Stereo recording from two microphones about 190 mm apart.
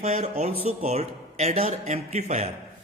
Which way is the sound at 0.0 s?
35° right (ahead or behind).